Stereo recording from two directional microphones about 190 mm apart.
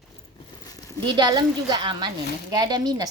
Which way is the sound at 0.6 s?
20° left (ahead or behind).